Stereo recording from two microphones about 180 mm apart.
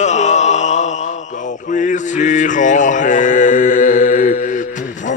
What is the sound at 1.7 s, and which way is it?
Mantra, 45° left (ahead or behind).